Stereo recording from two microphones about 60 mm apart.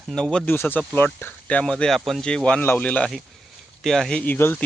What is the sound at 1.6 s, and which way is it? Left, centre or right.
Speech, centre.